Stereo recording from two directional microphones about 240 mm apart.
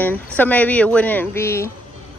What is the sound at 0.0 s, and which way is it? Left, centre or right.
Speech, centre.